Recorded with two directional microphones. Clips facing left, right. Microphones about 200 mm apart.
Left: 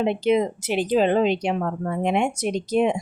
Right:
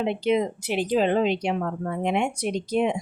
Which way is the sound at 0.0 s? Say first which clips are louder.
Left 3 dB; 50° left (ahead or behind).